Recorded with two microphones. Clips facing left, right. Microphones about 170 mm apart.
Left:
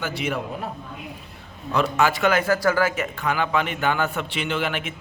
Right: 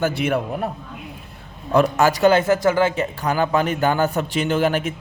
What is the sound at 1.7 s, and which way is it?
Speech, 45° right (ahead or behind).